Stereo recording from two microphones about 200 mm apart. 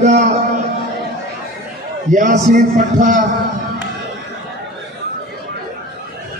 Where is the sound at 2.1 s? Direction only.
40° right (ahead or behind).